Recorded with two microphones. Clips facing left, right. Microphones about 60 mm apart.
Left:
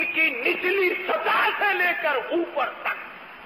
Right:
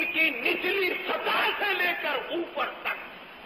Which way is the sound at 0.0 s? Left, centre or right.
Left.